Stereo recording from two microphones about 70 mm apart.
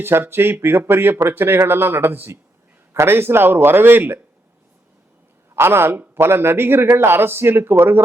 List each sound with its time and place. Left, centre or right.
0.0 s a man's voice: right
5.5 s a man's voice: right